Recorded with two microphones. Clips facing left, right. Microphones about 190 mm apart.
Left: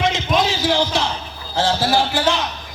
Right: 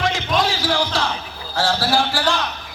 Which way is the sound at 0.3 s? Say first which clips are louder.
Left 2 dB; 20° left (ahead or behind).